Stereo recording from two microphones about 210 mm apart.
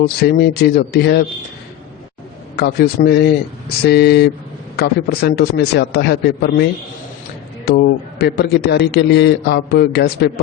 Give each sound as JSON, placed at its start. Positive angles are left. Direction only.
{"t": 0.2, "sound": "a man's voice", "side_deg": 45}
{"t": 2.6, "sound": "a man's voice", "side_deg": 45}
{"t": 7.8, "sound": "a man's voice", "side_deg": 50}